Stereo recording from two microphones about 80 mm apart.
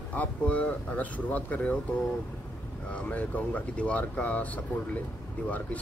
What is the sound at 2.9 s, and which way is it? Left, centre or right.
Speech, centre.